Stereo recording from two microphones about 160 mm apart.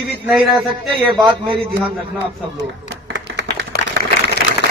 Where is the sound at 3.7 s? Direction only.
75° left (ahead or behind).